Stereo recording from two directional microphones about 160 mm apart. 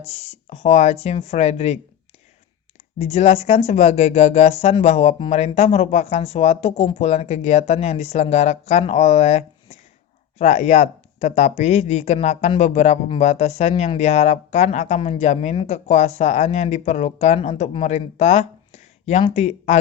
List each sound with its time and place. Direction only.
0.1 s speech: 40° left (ahead or behind)
3.0 s speech: 40° left (ahead or behind)
18.2 s a sound: 45° left (ahead or behind)
19.2 s speech: 40° left (ahead or behind)